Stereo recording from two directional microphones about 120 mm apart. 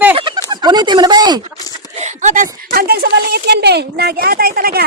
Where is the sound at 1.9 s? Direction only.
80° right.